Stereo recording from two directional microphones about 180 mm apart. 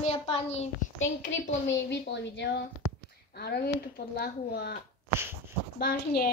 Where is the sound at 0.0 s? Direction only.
35° left (ahead or behind).